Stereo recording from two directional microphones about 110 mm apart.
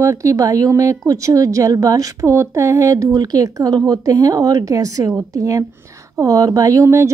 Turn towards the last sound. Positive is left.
turn(degrees=-25)  # may be behind; listen again after turning